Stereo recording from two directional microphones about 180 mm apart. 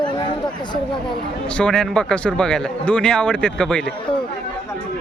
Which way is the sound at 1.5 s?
5° left (ahead or behind).